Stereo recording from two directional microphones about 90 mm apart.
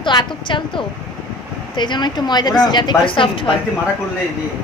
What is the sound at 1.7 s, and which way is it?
A woman's voice, 60° left (ahead or behind).